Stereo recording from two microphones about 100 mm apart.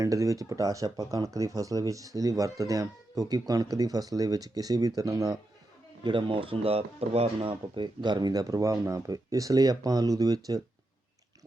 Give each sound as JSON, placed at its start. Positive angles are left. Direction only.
{"t": 0.0, "sound": "speech", "side_deg": -30}
{"t": 6.0, "sound": "speech", "side_deg": -55}